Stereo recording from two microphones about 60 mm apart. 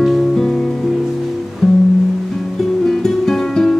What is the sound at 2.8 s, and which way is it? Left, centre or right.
Music, centre.